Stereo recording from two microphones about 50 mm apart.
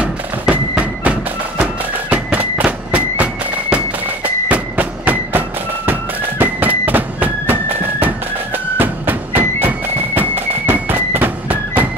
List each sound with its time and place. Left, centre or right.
0.0 s music: right
8.7 s music: right